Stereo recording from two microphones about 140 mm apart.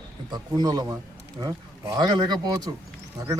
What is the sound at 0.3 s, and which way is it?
Speech, 30° right (ahead or behind).